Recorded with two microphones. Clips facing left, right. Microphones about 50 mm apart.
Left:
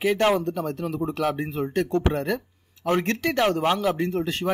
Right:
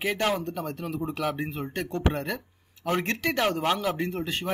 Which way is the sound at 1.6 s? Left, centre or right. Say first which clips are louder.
Left 7 dB; centre.